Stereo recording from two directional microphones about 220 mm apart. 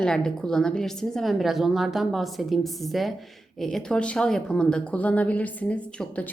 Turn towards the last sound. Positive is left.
turn(degrees=5)  # may be behind; listen again after turning